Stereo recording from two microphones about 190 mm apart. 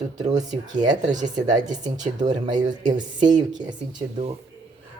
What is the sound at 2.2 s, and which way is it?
Speech, 40° right (ahead or behind).